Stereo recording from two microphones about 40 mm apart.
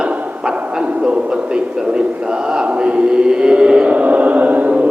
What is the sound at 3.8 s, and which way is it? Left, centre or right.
Chant, right.